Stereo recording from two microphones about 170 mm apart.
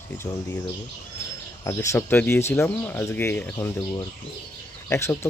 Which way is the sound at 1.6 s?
15° left (ahead or behind).